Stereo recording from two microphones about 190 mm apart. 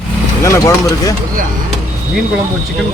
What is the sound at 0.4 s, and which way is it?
Speech, 15° left (ahead or behind).